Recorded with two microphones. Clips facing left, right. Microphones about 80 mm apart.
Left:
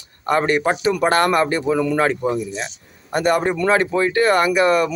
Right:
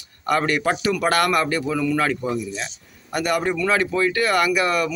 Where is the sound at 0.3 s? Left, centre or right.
Left.